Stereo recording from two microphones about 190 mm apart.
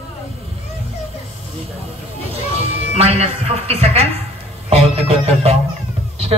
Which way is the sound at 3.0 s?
30° right (ahead or behind).